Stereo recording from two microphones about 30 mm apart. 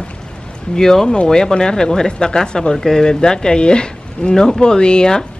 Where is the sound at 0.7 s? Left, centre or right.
Centre.